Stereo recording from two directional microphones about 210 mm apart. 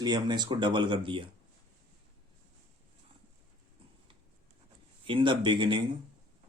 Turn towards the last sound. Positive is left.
turn(degrees=-25)  # may be behind; listen again after turning